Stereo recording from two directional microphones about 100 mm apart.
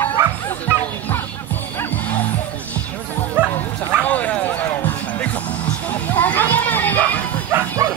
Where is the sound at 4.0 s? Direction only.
15° left (ahead or behind).